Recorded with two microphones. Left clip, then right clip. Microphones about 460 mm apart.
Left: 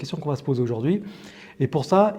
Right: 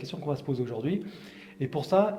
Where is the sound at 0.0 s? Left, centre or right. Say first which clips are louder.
Left 5 dB; left.